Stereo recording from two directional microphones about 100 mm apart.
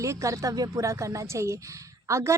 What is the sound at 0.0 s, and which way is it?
A woman's voice, 30° right (ahead or behind).